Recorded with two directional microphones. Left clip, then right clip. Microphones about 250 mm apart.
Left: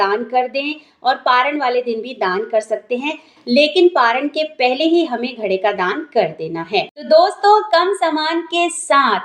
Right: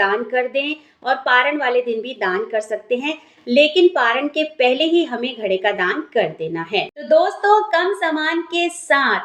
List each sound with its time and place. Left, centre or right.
0.0 s a woman's voice: left